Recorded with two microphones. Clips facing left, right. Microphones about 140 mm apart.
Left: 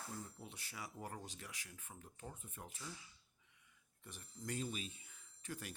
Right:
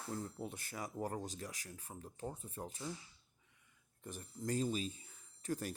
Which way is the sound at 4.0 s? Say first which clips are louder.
Right 7 dB; 45° right (ahead or behind).